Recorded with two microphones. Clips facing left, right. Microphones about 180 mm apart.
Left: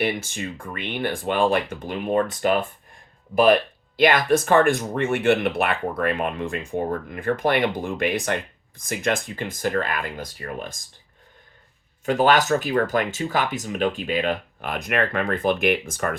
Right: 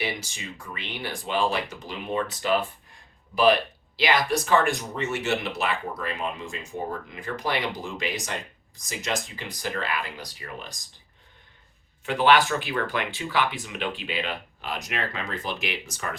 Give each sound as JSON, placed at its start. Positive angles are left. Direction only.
{"t": 0.0, "sound": "speech", "side_deg": 55}
{"t": 12.0, "sound": "speech", "side_deg": 45}